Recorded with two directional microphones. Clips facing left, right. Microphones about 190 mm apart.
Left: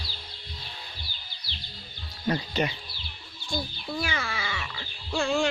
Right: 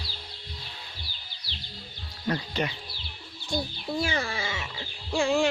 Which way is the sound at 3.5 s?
20° right (ahead or behind).